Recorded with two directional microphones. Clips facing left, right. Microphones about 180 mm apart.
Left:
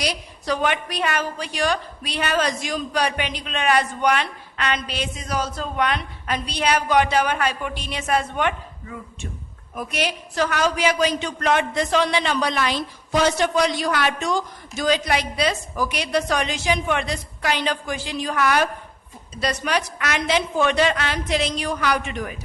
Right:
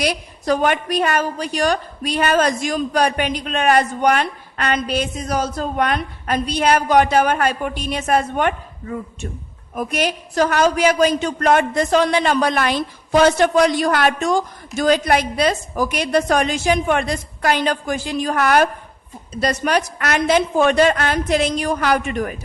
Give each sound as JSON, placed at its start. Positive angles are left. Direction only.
{"t": 0.0, "sound": "a woman's voice", "side_deg": -50}